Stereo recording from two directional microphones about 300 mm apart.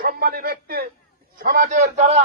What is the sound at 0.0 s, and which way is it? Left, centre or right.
A man's voice, right.